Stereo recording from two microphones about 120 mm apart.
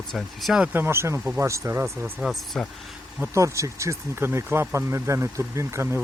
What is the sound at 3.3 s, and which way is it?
Speech, 25° right (ahead or behind).